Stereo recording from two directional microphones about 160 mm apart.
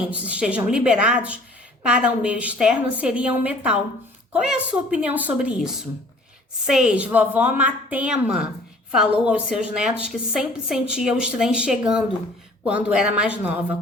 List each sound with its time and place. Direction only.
0.2 s a woman's voice: 5° right (ahead or behind)